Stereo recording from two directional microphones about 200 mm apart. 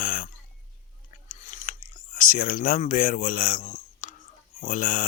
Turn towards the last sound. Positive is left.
turn(degrees=40)  # may be behind; listen again after turning